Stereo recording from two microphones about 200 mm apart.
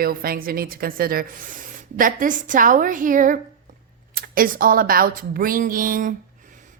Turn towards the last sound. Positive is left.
turn(degrees=-45)  # may be behind; listen again after turning